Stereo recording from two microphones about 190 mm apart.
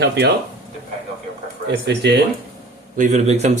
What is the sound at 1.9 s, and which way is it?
Speech, 60° right (ahead or behind).